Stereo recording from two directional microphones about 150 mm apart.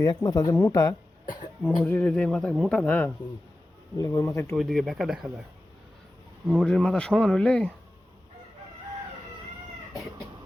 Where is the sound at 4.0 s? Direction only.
20° left (ahead or behind).